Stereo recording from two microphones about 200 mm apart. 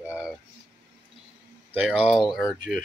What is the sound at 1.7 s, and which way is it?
Speech, 5° right (ahead or behind).